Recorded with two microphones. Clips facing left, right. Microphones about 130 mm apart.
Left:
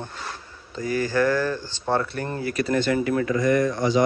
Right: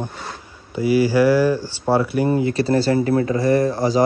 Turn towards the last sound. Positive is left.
turn(degrees=-35)  # may be behind; listen again after turning